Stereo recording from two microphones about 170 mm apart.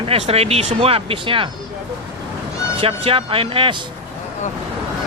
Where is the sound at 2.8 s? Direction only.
30° right (ahead or behind).